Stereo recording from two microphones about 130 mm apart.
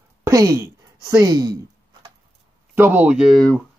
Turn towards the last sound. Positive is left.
turn(degrees=0)  # may be behind; listen again after turning